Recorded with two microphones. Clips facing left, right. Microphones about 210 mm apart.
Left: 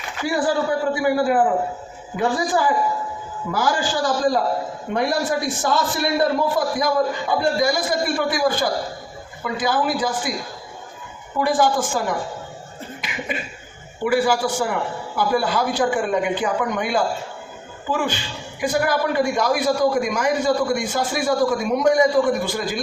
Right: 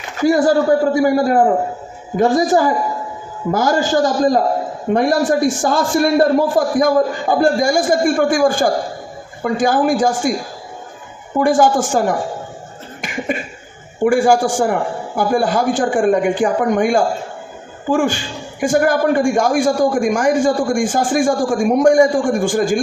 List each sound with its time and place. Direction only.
0.2 s a man's voice: 40° right (ahead or behind)
11.3 s a man's voice: 45° right (ahead or behind)
13.0 s cough: 45° right (ahead or behind)
14.0 s a man's voice: 45° right (ahead or behind)